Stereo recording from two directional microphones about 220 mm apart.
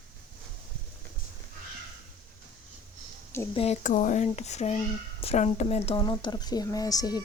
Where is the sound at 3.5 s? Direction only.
30° left (ahead or behind).